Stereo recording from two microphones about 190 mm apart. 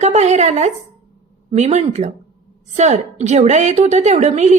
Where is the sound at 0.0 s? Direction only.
35° right (ahead or behind).